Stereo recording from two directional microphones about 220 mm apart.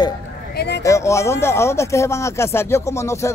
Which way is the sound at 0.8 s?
15° left (ahead or behind).